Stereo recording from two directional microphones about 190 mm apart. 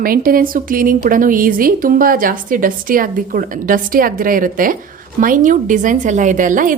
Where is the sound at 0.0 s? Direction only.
50° right (ahead or behind).